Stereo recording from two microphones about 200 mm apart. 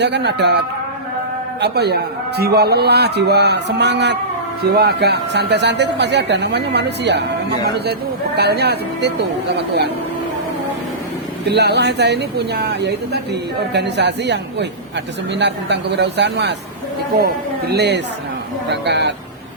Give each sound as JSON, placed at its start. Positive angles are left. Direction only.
{"t": 0.0, "sound": "speech", "side_deg": -60}
{"t": 1.6, "sound": "speech", "side_deg": -55}
{"t": 8.4, "sound": "speech", "side_deg": -55}
{"t": 11.4, "sound": "speech", "side_deg": -55}